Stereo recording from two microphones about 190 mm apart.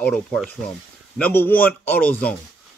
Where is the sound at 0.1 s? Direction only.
5° left (ahead or behind).